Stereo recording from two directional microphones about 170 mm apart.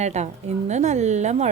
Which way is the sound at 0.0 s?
40° right (ahead or behind).